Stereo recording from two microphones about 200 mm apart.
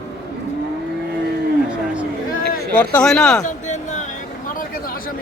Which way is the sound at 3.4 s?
40° left (ahead or behind).